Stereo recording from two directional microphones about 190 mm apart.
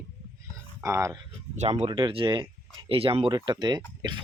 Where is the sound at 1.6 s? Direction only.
35° right (ahead or behind).